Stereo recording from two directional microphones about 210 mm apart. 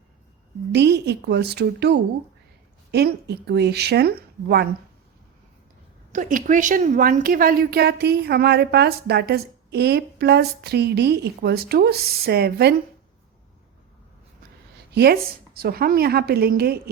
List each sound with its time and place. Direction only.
0.7 s a woman's voice: 55° right (ahead or behind)
6.1 s a woman's voice: 40° right (ahead or behind)
14.9 s a woman's voice: 50° right (ahead or behind)